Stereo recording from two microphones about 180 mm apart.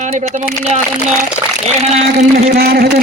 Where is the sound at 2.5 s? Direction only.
60° right (ahead or behind).